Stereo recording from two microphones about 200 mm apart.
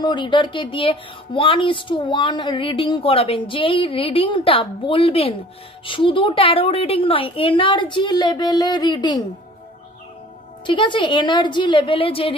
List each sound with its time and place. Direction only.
0.0 s speech: 25° left (ahead or behind)
10.7 s speech: 25° left (ahead or behind)